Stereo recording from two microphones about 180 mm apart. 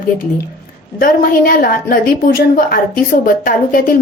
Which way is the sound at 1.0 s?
50° left (ahead or behind).